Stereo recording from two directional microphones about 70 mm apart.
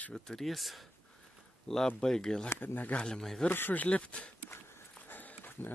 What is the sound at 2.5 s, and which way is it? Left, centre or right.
Speech, left.